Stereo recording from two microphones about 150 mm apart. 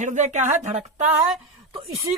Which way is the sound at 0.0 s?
55° right (ahead or behind).